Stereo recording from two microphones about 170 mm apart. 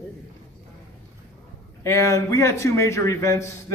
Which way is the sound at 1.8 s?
15° left (ahead or behind).